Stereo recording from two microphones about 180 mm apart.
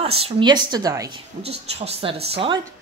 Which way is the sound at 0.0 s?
30° right (ahead or behind).